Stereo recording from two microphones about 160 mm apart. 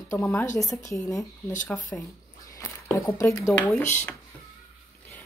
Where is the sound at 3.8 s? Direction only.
50° left (ahead or behind).